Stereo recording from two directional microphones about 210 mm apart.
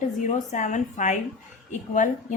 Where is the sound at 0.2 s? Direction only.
35° left (ahead or behind).